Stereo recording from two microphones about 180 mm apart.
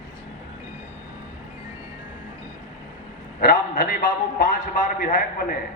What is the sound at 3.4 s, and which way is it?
A man's voice, 55° left (ahead or behind).